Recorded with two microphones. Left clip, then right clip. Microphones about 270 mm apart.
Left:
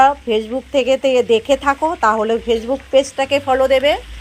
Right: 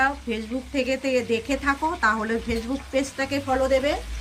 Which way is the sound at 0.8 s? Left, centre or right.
Left.